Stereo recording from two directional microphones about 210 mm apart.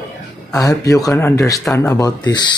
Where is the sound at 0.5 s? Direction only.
15° left (ahead or behind).